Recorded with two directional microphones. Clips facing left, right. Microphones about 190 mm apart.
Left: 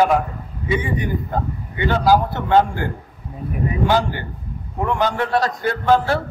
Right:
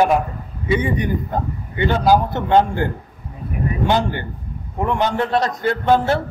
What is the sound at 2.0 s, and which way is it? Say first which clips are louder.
Speech: even; 20° right (ahead or behind).